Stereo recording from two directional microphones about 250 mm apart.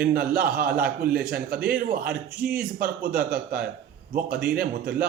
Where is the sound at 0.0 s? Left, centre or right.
Right.